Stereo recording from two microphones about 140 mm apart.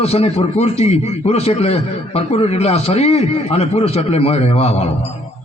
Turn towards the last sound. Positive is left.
turn(degrees=50)  # may be behind; listen again after turning